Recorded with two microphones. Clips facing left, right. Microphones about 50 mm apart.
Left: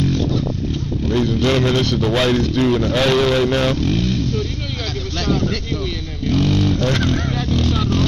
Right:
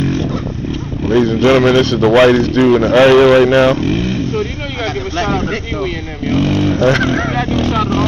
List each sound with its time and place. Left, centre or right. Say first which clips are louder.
1.0 s vehicle: right 7 dB; right
1.6 s a man's voice: right 7 dB; right